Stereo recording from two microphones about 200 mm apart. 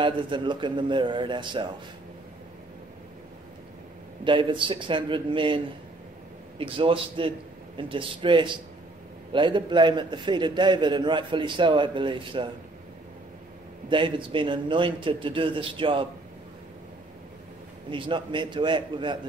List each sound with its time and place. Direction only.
0.0 s a man's voice: 25° right (ahead or behind)
4.2 s a man's voice: 25° right (ahead or behind)
6.6 s a man's voice: 25° right (ahead or behind)
13.8 s a man's voice: 25° right (ahead or behind)
17.8 s a man's voice: 25° right (ahead or behind)